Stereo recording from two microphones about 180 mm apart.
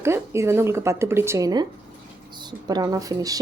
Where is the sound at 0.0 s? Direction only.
15° right (ahead or behind).